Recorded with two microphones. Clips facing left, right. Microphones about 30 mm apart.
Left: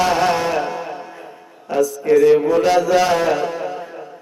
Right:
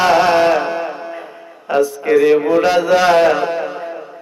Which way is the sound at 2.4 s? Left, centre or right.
Right.